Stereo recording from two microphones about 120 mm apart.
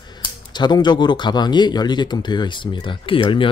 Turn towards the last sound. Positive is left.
turn(degrees=45)  # may be behind; listen again after turning